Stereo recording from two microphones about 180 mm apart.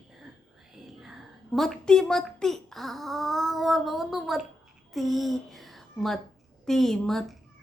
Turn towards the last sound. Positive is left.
turn(degrees=0)  # may be behind; listen again after turning